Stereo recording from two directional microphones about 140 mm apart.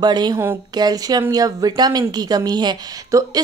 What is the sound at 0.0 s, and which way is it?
A woman's voice, 30° right (ahead or behind).